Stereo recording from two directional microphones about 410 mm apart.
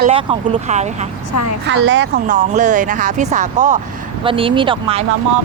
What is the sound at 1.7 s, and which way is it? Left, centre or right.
Speech, right.